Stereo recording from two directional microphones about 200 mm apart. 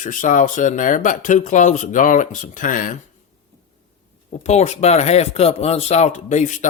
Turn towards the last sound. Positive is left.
turn(degrees=40)  # may be behind; listen again after turning